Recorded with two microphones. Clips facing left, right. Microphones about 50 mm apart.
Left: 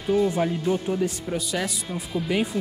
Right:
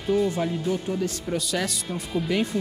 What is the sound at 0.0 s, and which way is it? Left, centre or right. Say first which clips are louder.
Speech: left 1 dB; centre.